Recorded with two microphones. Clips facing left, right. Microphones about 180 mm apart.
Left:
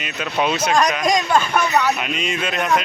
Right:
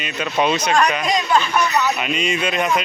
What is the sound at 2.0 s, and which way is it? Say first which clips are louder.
Speech: right 2 dB; centre (ahead or behind).